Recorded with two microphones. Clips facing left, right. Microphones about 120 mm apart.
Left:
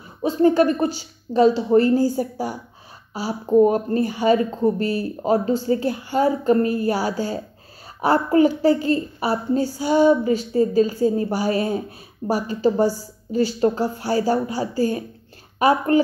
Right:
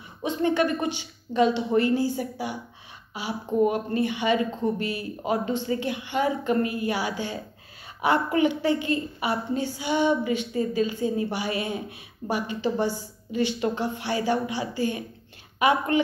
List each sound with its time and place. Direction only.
0.2 s a woman's voice: 35° left (ahead or behind)